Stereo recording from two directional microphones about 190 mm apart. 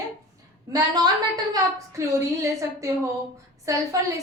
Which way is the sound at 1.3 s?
20° right (ahead or behind).